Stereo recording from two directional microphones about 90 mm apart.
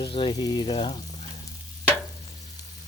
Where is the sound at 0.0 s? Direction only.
75° left (ahead or behind).